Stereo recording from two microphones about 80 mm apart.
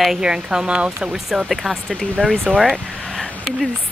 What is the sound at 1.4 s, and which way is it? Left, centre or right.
Speech, centre.